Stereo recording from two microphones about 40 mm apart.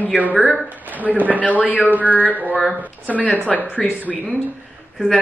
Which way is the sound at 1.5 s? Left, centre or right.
Left.